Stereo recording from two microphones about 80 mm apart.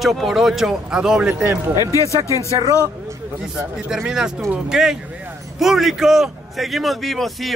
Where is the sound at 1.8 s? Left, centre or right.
Left.